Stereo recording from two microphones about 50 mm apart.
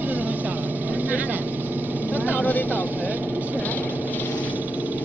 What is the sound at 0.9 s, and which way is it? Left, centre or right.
Speech, right.